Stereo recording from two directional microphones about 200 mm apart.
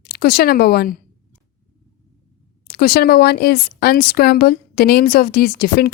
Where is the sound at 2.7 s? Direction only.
50° left (ahead or behind).